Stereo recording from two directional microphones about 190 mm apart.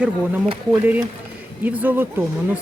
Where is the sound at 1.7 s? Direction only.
10° right (ahead or behind).